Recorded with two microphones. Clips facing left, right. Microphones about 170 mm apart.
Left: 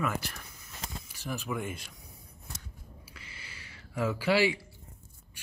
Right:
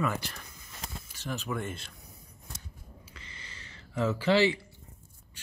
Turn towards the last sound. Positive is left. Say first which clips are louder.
# right 2 dB
turn(degrees=10)  # may be behind; listen again after turning